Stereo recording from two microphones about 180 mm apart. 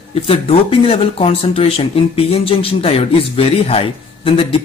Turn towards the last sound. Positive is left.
turn(degrees=30)  # may be behind; listen again after turning